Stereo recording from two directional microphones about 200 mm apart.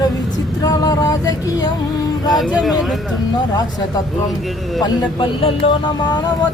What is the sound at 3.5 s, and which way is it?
Speech, 20° left (ahead or behind).